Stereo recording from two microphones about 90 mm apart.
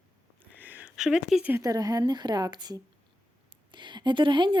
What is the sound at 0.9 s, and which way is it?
Speech, 5° right (ahead or behind).